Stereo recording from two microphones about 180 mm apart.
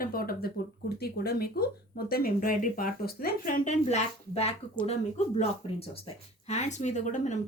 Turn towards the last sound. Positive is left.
turn(degrees=40)  # may be behind; listen again after turning